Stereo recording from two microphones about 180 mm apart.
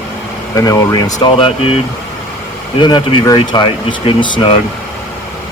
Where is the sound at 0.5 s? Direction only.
20° left (ahead or behind).